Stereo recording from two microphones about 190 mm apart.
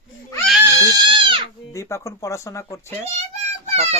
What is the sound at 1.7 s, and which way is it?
Speech, 15° left (ahead or behind).